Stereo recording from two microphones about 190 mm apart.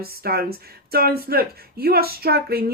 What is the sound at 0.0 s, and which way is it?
Speech, 55° right (ahead or behind).